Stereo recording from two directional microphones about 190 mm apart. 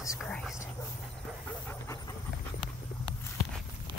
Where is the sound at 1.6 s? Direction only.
15° left (ahead or behind).